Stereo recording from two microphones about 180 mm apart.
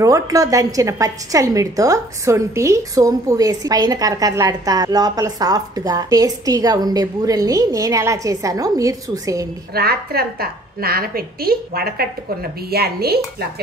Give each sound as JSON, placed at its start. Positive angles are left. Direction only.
{"t": 0.0, "sound": "a woman's voice", "side_deg": -20}
{"t": 9.8, "sound": "a woman's voice", "side_deg": -60}